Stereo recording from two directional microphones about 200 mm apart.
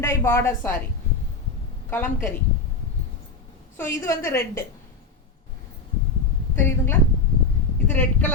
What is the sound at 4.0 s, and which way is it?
Speech, 15° left (ahead or behind).